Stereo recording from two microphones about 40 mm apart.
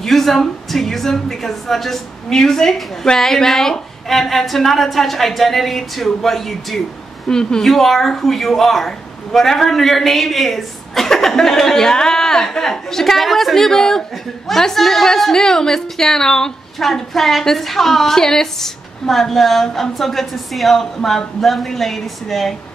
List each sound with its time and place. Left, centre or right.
0.0 s a woman's voice: centre
7.2 s a man's voice: centre
7.6 s a man's voice: centre